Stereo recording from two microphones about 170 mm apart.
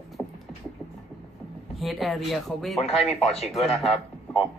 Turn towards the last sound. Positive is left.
turn(degrees=0)  # may be behind; listen again after turning